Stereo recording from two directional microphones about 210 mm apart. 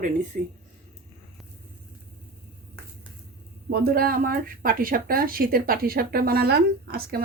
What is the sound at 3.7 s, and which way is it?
A woman's voice, 50° right (ahead or behind).